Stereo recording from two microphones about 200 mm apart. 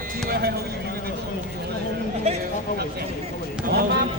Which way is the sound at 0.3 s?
50° right (ahead or behind).